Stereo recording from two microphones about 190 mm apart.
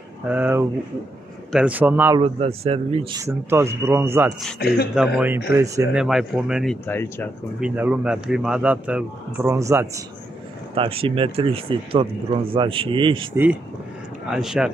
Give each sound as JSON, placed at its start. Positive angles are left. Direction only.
{"t": 0.3, "sound": "speech", "side_deg": -10}
{"t": 2.1, "sound": "speech", "side_deg": -30}
{"t": 3.2, "sound": "speech", "side_deg": -15}
{"t": 4.6, "sound": "speech", "side_deg": 55}
{"t": 4.9, "sound": "speech", "side_deg": -5}
{"t": 6.0, "sound": "speech", "side_deg": -5}
{"t": 10.7, "sound": "speech", "side_deg": -30}
{"t": 13.3, "sound": "speech", "side_deg": -10}